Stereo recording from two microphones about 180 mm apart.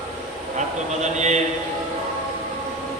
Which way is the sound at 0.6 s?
40° right (ahead or behind).